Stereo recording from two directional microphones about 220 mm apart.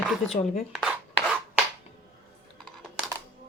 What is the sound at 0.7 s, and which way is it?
Rub, centre (ahead or behind).